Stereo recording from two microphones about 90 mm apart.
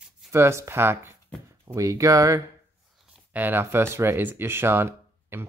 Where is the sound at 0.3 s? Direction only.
30° right (ahead or behind).